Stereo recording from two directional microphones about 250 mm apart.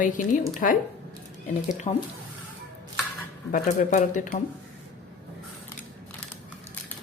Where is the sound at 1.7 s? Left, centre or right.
Left.